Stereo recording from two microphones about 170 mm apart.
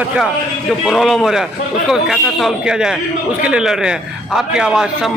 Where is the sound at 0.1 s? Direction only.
Centre (ahead or behind).